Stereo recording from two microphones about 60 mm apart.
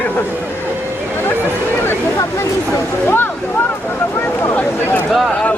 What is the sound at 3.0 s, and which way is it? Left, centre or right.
Speech, left.